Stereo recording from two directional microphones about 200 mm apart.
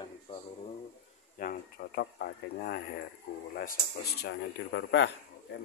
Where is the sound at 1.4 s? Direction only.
45° left (ahead or behind).